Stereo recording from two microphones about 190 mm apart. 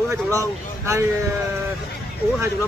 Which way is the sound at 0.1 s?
15° right (ahead or behind).